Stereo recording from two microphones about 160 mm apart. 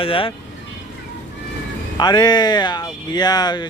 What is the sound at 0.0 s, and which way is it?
Speech, 35° left (ahead or behind).